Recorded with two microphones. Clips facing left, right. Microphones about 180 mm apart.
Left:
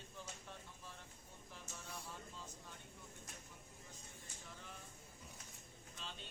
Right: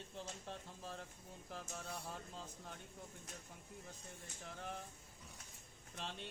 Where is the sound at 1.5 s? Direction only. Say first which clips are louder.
Right 5 dB; 55° right (ahead or behind).